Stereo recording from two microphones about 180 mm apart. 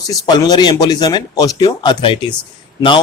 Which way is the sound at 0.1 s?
20° left (ahead or behind).